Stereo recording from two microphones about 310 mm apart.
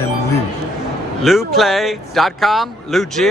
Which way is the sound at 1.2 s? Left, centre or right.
Centre.